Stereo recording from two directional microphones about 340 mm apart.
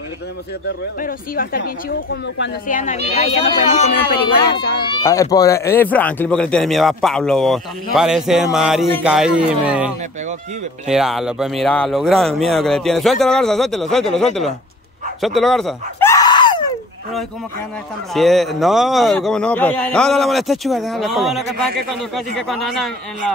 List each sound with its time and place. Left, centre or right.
1.0 s a woman's voice: left
4.8 s speech: centre
15.2 s screaming: centre
18.1 s speech: centre